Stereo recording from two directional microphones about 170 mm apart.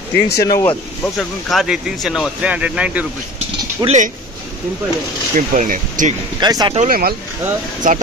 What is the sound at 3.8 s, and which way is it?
Speech, 45° right (ahead or behind).